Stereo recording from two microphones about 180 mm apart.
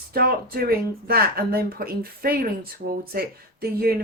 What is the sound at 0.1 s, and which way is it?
Speech, 55° right (ahead or behind).